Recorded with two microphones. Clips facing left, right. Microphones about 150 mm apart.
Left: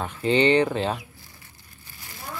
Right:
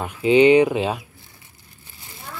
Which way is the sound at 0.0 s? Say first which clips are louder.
Right 6 dB; 10° right (ahead or behind).